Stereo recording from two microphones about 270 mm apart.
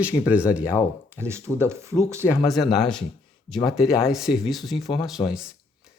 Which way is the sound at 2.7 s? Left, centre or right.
Centre.